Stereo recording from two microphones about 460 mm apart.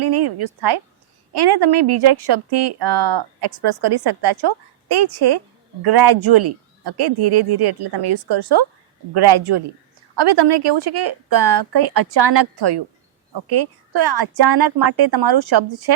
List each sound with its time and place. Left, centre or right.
0.0 s speech: right